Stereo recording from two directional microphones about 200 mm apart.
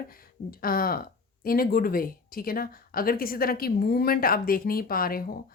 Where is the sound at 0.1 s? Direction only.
45° left (ahead or behind).